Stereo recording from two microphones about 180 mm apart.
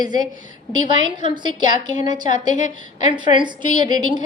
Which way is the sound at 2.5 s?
40° left (ahead or behind).